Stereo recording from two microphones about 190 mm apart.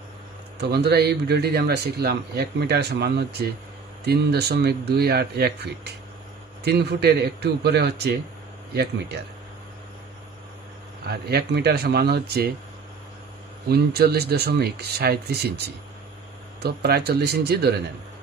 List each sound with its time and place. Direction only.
0.6 s a man's voice: 60° right (ahead or behind)
11.1 s a man's voice: 55° right (ahead or behind)
13.7 s a man's voice: 55° right (ahead or behind)